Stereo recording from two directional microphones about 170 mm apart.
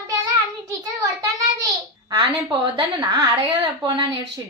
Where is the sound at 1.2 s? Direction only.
20° right (ahead or behind).